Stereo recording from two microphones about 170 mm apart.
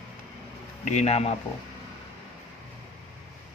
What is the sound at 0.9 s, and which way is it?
Speech, 40° left (ahead or behind).